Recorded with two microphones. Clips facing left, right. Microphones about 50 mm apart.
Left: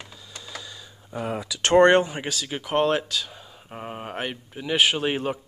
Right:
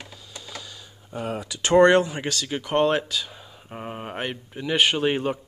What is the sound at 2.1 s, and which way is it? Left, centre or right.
Speech, centre.